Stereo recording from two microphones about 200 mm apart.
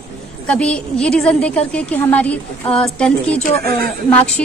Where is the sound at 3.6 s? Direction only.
50° right (ahead or behind).